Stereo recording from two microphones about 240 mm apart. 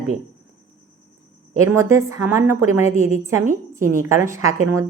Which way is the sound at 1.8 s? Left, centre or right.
Centre.